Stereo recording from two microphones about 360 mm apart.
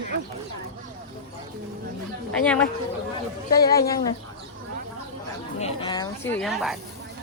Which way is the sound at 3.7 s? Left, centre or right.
Centre.